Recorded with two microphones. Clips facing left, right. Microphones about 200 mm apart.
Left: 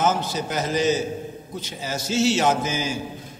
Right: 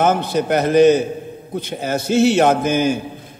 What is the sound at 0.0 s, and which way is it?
A man's voice, 60° right (ahead or behind).